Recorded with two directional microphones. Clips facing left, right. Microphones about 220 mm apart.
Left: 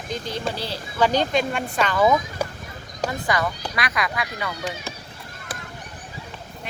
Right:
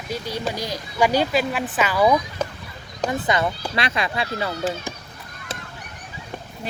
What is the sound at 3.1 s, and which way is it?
Speech, 20° right (ahead or behind).